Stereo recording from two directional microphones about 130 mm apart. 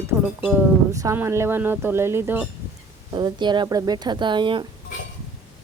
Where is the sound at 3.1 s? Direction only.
35° right (ahead or behind).